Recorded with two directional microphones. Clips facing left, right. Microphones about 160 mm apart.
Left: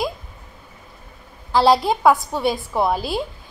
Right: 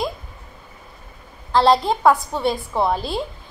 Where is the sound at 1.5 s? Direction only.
5° left (ahead or behind).